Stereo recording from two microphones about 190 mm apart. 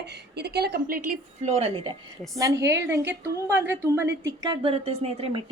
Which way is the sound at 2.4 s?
15° right (ahead or behind).